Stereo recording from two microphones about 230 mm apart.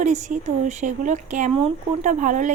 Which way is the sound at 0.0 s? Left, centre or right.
Right.